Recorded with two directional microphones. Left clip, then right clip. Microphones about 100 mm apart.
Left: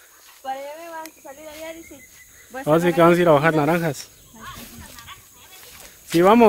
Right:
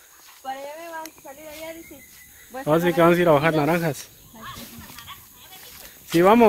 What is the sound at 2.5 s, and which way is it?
Speech, 30° left (ahead or behind).